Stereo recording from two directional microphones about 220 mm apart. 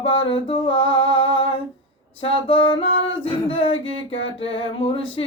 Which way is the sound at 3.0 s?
25° left (ahead or behind).